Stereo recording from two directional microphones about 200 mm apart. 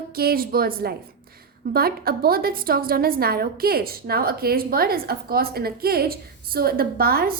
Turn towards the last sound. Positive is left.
turn(degrees=-50)  # may be behind; listen again after turning